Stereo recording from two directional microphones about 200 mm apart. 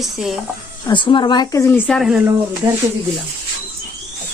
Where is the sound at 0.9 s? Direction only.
25° left (ahead or behind).